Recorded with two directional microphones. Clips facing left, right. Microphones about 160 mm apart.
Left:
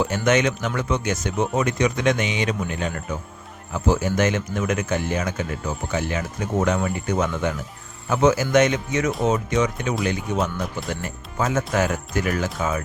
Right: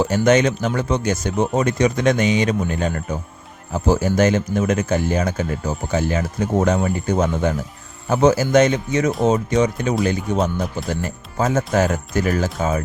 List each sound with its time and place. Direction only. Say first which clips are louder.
0.0 s speech: right 4 dB; 35° right (ahead or behind)